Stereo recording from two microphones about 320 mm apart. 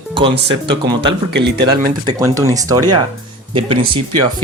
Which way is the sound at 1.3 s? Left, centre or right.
Right.